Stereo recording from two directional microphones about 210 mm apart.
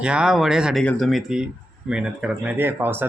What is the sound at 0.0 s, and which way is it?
Speech, 5° right (ahead or behind).